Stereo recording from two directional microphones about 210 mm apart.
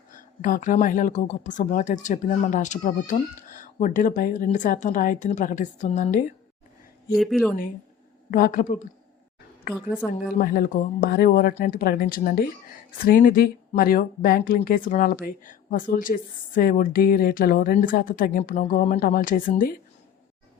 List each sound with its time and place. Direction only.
0.1 s a woman's voice: 40° left (ahead or behind)
7.1 s speech: centre (ahead or behind)
8.3 s a woman's voice: 40° left (ahead or behind)
10.0 s speech: 5° left (ahead or behind)
10.4 s a woman's voice: 45° left (ahead or behind)